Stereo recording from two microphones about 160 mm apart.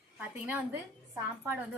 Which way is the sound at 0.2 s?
10° right (ahead or behind).